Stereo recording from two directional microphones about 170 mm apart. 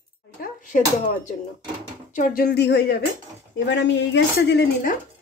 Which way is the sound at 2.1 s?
55° left (ahead or behind).